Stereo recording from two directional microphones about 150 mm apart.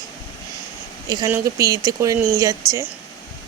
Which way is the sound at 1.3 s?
20° right (ahead or behind).